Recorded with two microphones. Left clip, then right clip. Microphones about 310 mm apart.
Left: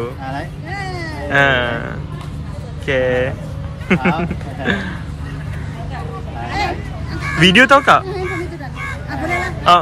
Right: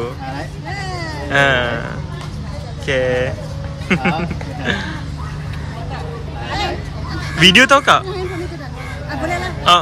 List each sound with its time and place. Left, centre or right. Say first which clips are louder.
0.0 s speech: even; centre
7.3 s speech: even; centre
9.1 s a sound: even; centre